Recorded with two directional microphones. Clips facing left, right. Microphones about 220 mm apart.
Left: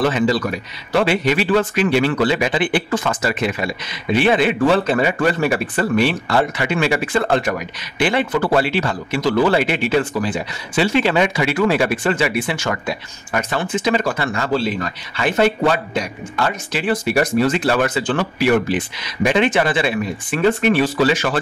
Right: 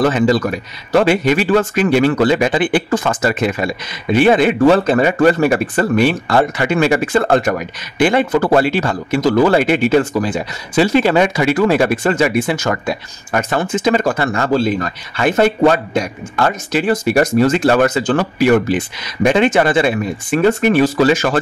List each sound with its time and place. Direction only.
0.0 s speech: 45° right (ahead or behind)